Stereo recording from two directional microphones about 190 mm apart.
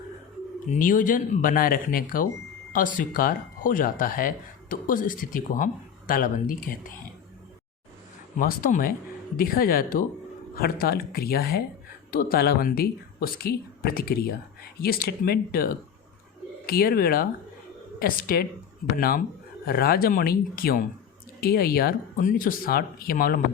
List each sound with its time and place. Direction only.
0.7 s speech: 45° left (ahead or behind)
8.4 s speech: 45° left (ahead or behind)